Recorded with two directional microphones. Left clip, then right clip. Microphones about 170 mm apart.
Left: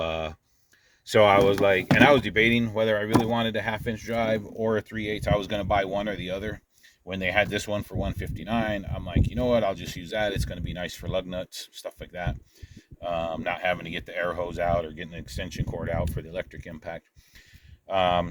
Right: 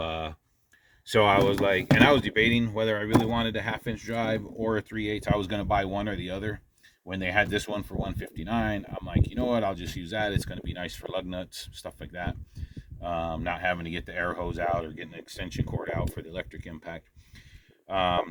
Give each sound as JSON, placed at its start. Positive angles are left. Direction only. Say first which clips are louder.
{"t": 0.0, "sound": "a sound", "louder": "left 3 dB", "side_deg": 55}
{"t": 1.1, "sound": "speech", "louder": "left 3 dB", "side_deg": 60}
{"t": 17.8, "sound": "speech", "louder": "left 3 dB", "side_deg": 45}